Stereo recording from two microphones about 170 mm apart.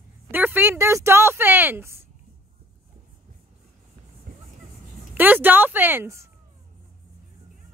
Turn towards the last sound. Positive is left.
turn(degrees=-15)  # may be behind; listen again after turning